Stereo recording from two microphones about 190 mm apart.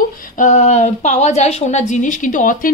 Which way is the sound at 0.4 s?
40° left (ahead or behind).